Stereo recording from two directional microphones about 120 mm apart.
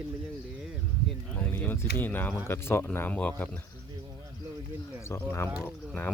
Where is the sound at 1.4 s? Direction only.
15° left (ahead or behind).